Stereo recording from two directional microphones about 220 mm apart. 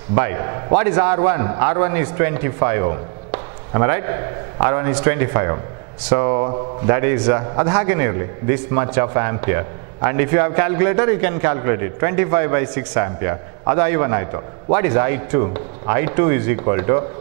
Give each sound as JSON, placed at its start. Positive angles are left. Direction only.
{"t": 0.1, "sound": "a man's voice", "side_deg": -15}